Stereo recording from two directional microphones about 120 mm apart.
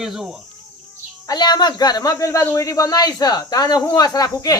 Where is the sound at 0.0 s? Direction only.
5° right (ahead or behind).